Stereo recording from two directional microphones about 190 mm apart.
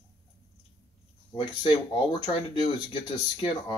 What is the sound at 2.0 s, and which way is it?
Speech, 20° left (ahead or behind).